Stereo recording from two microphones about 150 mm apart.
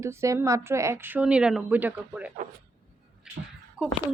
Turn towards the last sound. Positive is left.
turn(degrees=-5)  # may be behind; listen again after turning